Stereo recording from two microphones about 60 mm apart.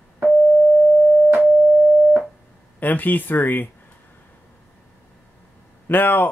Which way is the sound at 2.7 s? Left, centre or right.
Left.